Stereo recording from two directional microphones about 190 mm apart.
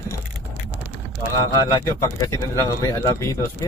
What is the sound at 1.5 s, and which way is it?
Speech, 15° left (ahead or behind).